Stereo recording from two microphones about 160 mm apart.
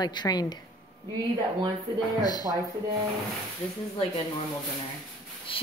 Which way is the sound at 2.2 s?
25° left (ahead or behind).